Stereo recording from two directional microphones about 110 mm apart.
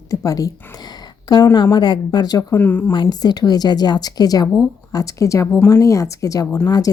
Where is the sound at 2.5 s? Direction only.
15° left (ahead or behind).